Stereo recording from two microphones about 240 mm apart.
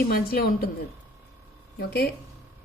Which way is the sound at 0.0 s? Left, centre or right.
Left.